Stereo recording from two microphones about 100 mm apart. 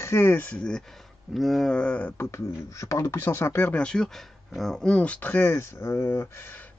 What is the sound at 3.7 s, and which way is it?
Speech, 10° left (ahead or behind).